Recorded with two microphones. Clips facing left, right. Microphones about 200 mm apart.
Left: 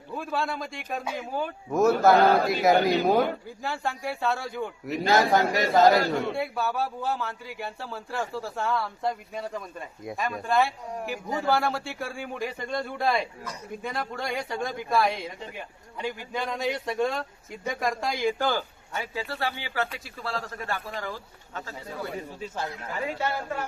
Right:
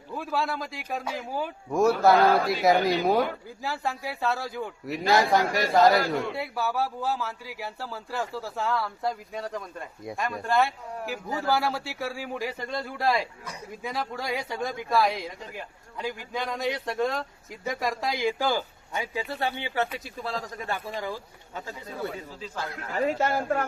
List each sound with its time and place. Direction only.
0.1 s speech: centre (ahead or behind)
22.7 s speech: 45° right (ahead or behind)